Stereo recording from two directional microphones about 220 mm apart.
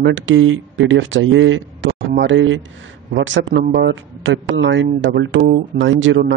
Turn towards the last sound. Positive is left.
turn(degrees=-60)  # may be behind; listen again after turning